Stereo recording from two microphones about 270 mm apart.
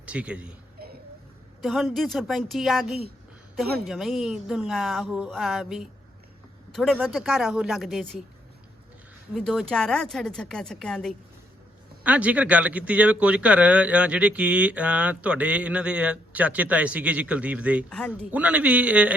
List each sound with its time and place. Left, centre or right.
0.0 s speech: centre
0.8 s a sound: right
1.6 s speech: centre
9.3 s speech: centre